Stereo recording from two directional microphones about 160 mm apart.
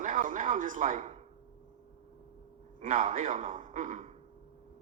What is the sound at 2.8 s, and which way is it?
A man's voice, 40° right (ahead or behind).